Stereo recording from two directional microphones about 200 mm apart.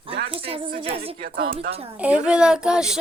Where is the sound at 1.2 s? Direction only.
45° right (ahead or behind).